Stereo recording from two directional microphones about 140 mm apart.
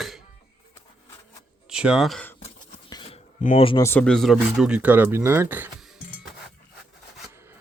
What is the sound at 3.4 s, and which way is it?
Speech, 70° left (ahead or behind).